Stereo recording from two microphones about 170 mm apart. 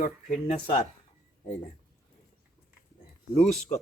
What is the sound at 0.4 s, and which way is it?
Speech, 50° left (ahead or behind).